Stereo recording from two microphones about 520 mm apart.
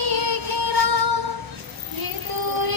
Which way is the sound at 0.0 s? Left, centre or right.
Right.